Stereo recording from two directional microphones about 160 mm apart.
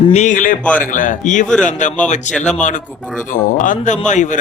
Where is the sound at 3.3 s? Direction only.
55° left (ahead or behind).